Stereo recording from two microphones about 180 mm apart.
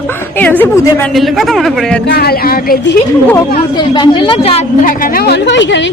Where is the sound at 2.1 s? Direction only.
60° left (ahead or behind).